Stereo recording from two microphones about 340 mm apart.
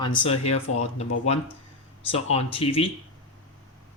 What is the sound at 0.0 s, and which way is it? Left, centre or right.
Speech, centre.